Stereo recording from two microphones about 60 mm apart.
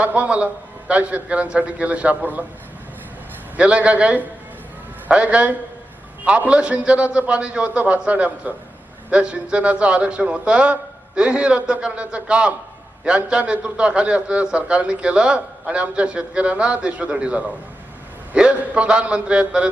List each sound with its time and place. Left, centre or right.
0.0 s a man's voice: right
3.6 s a man's voice: centre